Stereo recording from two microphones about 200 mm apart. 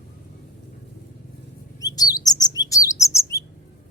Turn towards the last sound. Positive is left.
turn(degrees=15)  # may be behind; listen again after turning